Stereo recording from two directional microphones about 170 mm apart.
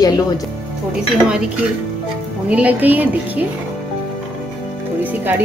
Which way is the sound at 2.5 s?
10° right (ahead or behind).